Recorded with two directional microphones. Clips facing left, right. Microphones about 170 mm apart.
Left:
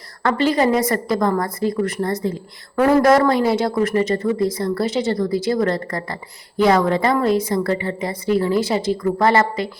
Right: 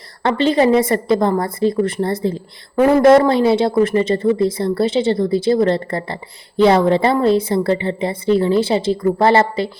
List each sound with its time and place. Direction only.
0.2 s speech: 25° right (ahead or behind)